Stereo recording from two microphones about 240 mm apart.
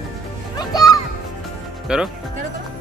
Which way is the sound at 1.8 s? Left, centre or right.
Centre.